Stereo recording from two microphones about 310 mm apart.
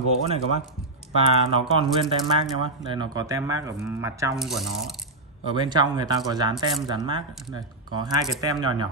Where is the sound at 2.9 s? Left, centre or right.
Centre.